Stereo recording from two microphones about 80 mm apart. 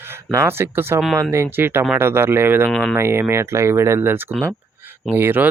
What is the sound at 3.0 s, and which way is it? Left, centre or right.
Speech, right.